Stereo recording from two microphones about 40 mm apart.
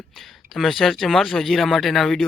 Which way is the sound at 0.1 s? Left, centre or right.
Centre.